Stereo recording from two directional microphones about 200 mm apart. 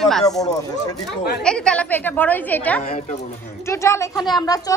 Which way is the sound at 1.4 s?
5° left (ahead or behind).